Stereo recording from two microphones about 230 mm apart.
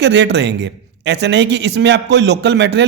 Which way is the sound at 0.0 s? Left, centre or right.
Right.